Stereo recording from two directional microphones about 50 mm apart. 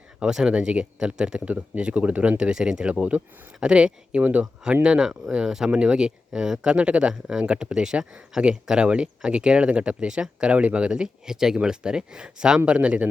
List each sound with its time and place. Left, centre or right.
0.3 s speech: centre
0.5 s speech: right
2.4 s speech: centre
4.2 s speech: right
4.7 s speech: centre